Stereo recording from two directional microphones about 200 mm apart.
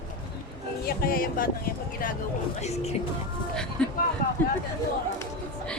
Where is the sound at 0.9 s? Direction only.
45° left (ahead or behind).